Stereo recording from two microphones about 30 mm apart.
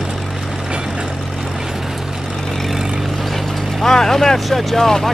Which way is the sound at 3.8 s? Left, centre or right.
Centre.